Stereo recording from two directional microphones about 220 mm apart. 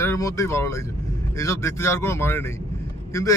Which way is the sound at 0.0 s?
15° left (ahead or behind).